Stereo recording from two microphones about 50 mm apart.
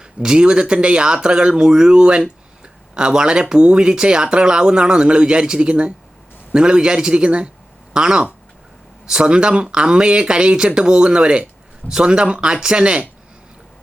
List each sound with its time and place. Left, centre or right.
0.0 s speech: centre